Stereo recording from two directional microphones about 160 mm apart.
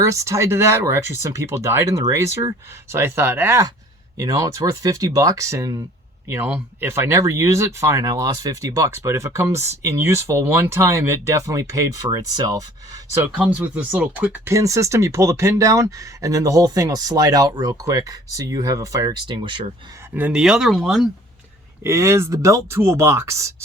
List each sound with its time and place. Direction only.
0.0 s speech: 20° right (ahead or behind)
13.3 s speech: 5° right (ahead or behind); by 19.6 s 30° right (ahead or behind)
20.1 s speech: 10° right (ahead or behind)
21.8 s speech: 15° right (ahead or behind)